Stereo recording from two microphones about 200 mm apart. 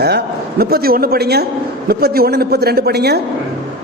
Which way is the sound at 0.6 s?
50° right (ahead or behind).